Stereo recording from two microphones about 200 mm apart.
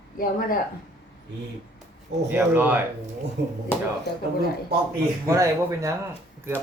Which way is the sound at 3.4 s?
55° right (ahead or behind).